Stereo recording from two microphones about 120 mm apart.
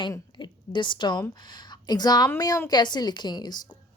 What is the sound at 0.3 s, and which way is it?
A woman's voice, 40° left (ahead or behind).